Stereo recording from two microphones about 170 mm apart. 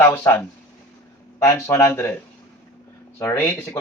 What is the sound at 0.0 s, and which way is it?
Speech, 15° left (ahead or behind).